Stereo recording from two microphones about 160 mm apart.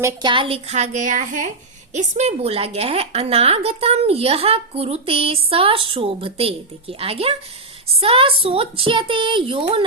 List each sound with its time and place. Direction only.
0.0 s a woman's voice: 30° right (ahead or behind)